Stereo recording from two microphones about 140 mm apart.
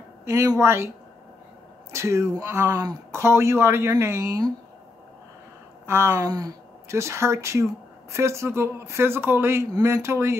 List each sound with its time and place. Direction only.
0.2 s speech: 20° right (ahead or behind)
5.9 s speech: 20° right (ahead or behind)